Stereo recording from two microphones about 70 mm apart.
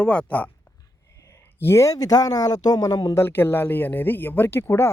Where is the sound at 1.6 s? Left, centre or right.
Left.